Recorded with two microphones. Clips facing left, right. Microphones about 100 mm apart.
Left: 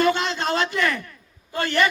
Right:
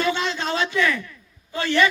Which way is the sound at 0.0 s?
50° left (ahead or behind).